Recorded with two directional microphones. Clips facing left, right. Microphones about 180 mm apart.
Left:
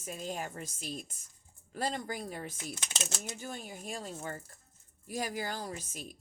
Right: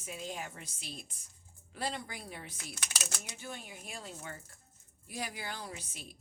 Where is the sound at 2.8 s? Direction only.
25° left (ahead or behind).